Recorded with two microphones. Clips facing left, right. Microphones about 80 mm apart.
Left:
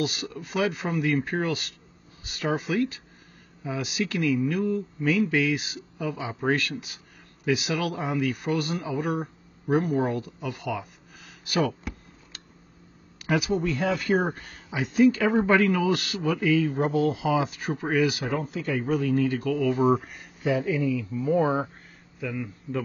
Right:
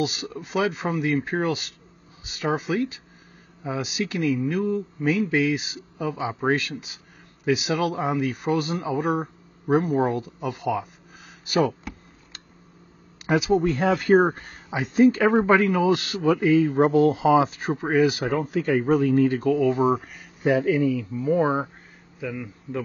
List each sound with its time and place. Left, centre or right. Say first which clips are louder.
0.0 s speech: right 2 dB; right
13.5 s speech: right 5 dB; right
15.4 s speech: right 3 dB; centre
16.7 s speech: right 6 dB; right
18.2 s speech: right 5 dB; right
19.8 s speech: right 1 dB; centre
20.4 s speech: right 4 dB; right
22.2 s speech: even; centre